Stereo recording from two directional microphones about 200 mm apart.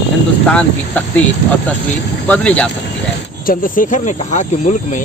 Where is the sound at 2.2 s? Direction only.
5° left (ahead or behind).